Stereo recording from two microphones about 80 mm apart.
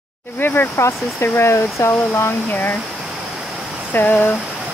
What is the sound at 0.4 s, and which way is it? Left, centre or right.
Speech, left.